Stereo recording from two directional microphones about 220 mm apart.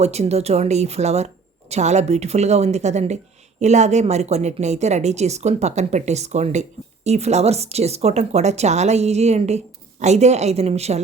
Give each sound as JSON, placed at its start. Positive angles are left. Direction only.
{"t": 0.0, "sound": "a woman's voice", "side_deg": -30}